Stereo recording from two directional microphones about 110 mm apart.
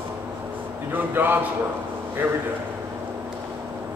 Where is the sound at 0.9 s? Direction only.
20° right (ahead or behind).